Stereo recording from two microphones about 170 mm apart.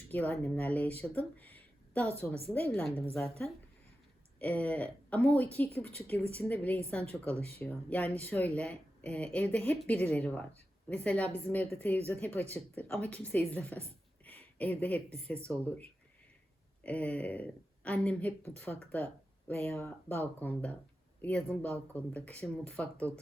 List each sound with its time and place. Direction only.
0.1 s speech: 10° left (ahead or behind)
4.4 s speech: 10° left (ahead or behind)
5.8 s speech: 35° right (ahead or behind)
6.3 s speech: 10° left (ahead or behind)
16.8 s speech: 10° left (ahead or behind)